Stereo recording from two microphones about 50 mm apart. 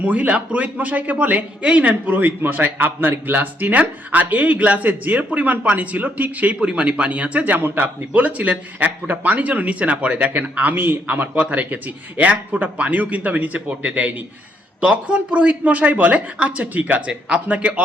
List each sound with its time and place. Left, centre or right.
0.0 s a man's voice: right
17.1 s speech: centre
17.5 s speech: right